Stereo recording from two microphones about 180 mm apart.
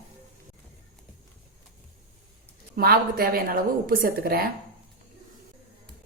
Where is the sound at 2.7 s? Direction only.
60° right (ahead or behind).